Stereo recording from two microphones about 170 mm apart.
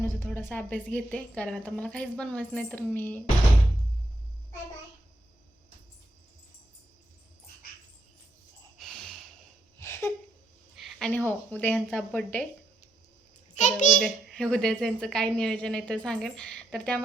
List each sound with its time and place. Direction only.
0.0 s a woman's voice: 10° left (ahead or behind)
8.8 s snort: 5° left (ahead or behind)
9.7 s a sound: 15° left (ahead or behind)
10.8 s a sound: centre (ahead or behind)
11.3 s a woman's voice: 10° left (ahead or behind)
13.5 s a child's voice: 45° left (ahead or behind)
14.0 s a woman's voice: 5° left (ahead or behind)